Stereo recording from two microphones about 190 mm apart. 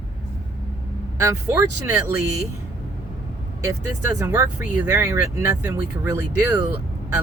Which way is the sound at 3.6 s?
15° right (ahead or behind).